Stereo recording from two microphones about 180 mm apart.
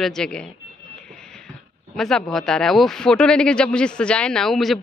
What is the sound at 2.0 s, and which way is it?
Speech, centre (ahead or behind).